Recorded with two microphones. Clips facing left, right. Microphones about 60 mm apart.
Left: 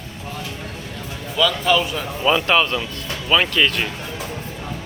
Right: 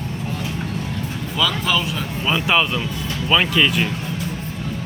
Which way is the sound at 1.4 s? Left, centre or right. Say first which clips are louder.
Left 3 dB; centre.